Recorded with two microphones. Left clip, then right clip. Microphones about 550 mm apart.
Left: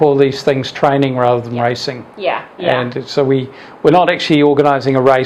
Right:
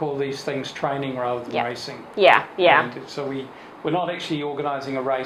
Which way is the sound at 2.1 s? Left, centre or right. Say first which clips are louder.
Right 5 dB; right.